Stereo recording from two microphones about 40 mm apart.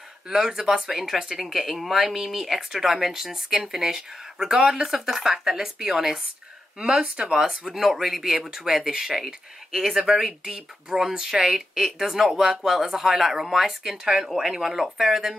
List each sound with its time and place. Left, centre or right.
0.3 s speech: centre
7.2 s speech: right
7.4 s speech: centre